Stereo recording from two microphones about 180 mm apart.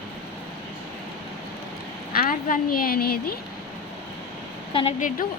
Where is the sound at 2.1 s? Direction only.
50° left (ahead or behind).